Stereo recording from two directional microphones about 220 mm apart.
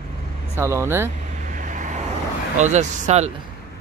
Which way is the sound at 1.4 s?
35° right (ahead or behind).